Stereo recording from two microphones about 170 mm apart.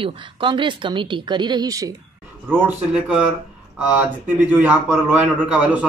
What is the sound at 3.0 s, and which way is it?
A man's voice, 5° right (ahead or behind).